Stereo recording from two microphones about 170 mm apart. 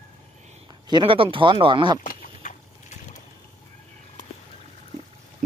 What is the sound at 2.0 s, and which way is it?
Vehicle, 50° left (ahead or behind).